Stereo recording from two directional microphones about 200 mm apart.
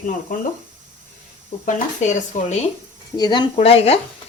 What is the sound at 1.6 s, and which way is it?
Speech, 35° left (ahead or behind).